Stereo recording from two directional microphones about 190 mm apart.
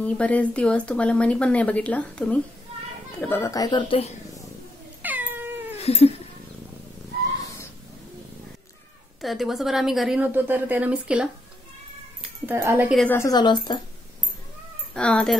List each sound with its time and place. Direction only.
0.0 s a woman's voice: 5° left (ahead or behind); by 4.1 s 25° left (ahead or behind)
5.0 s cat: 10° right (ahead or behind)
5.8 s cat: 35° left (ahead or behind)
9.2 s a woman's voice: centre (ahead or behind)
12.9 s a woman's voice: 5° left (ahead or behind)
13.2 s a woman's voice: 20° left (ahead or behind)
15.0 s a woman's voice: 5° left (ahead or behind)